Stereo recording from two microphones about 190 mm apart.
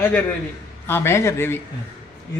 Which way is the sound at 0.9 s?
10° left (ahead or behind).